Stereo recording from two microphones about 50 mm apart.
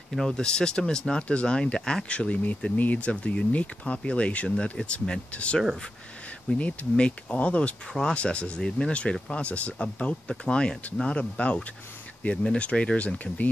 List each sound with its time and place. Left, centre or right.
0.2 s speech: centre
6.6 s speech: left